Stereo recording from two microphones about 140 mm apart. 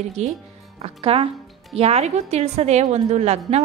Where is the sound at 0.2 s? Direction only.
50° right (ahead or behind).